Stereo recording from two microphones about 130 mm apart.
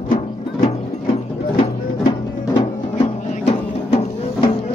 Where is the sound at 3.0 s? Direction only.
55° left (ahead or behind).